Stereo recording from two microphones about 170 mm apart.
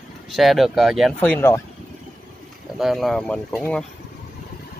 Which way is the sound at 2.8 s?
Centre (ahead or behind).